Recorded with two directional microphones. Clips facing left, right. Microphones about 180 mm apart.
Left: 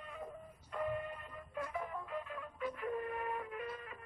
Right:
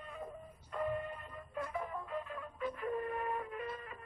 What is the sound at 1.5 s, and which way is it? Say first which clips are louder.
Music: right 1 dB; 35° right (ahead or behind).